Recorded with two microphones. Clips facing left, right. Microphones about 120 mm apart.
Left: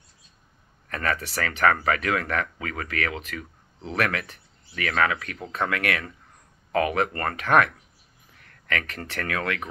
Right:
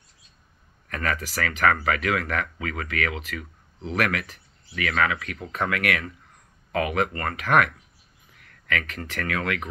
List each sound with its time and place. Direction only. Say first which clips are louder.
0.8 s speech: left 1 dB; 30° left (ahead or behind)